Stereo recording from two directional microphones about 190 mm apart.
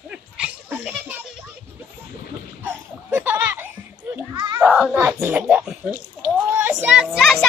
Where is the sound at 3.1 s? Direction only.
10° right (ahead or behind).